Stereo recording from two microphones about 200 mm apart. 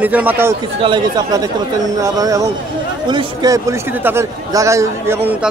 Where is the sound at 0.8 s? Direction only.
25° right (ahead or behind).